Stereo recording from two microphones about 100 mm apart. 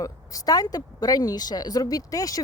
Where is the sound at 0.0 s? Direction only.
35° left (ahead or behind).